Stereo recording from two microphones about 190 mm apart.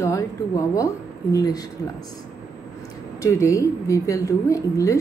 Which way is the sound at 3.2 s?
15° left (ahead or behind).